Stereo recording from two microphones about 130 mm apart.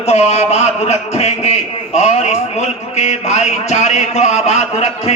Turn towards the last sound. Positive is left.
turn(degrees=55)  # may be behind; listen again after turning